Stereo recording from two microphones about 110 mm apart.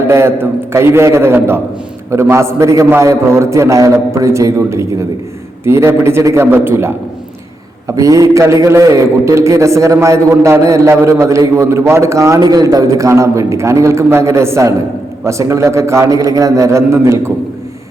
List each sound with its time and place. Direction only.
0.1 s a man's voice: 25° right (ahead or behind)